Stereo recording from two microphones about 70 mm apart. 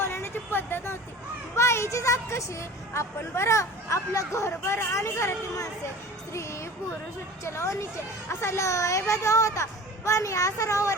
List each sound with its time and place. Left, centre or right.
0.0 s vehicle: left
1.5 s a woman's voice: left
7.4 s a woman's voice: left